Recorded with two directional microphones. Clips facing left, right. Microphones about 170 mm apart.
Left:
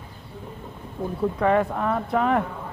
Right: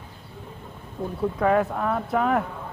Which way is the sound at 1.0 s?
Centre (ahead or behind).